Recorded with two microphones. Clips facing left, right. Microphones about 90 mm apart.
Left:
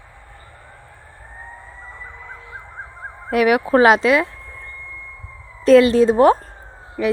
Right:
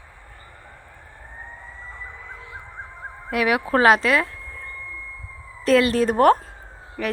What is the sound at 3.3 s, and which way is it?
Speech, 25° left (ahead or behind).